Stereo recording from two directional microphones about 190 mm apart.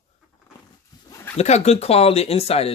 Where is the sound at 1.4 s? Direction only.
35° left (ahead or behind).